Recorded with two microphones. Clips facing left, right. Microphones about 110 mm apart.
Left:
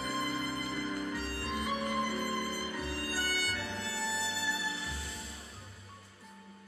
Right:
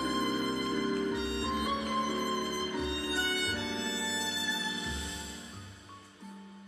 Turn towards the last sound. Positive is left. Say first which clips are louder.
# right 1 dB
turn(degrees=-20)  # may be behind; listen again after turning